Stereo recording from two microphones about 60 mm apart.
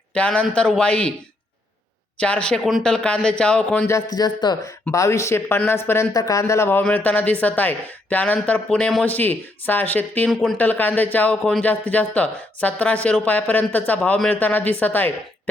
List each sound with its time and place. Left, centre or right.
0.1 s speech: centre
2.1 s a man's voice: centre
4.1 s speech: left
4.9 s speech: left
6.1 s speech: left
6.9 s speech: left
10.2 s speech: centre
10.6 s speech: left